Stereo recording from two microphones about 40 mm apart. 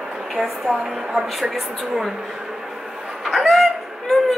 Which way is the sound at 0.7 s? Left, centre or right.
Centre.